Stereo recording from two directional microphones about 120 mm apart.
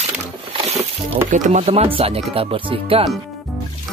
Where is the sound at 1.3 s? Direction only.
65° right (ahead or behind); by 2.4 s 50° right (ahead or behind).